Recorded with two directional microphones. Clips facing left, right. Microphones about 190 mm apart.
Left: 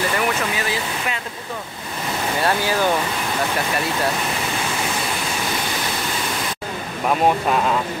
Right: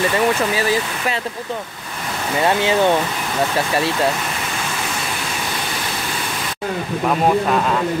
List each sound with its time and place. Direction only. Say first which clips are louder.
2.4 s speech: right 5 dB; 25° right (ahead or behind)